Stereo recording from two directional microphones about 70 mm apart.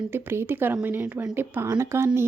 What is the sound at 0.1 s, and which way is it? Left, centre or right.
Speech, right.